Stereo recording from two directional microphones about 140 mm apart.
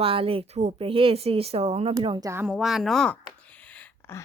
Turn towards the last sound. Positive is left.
turn(degrees=20)  # may be behind; listen again after turning